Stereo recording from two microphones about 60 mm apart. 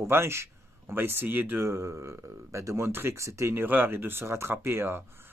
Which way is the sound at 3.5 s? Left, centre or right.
Right.